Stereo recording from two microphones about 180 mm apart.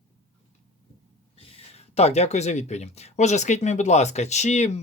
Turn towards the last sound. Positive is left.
turn(degrees=40)  # may be behind; listen again after turning